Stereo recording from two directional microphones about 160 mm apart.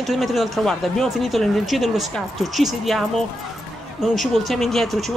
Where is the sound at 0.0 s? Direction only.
Centre (ahead or behind).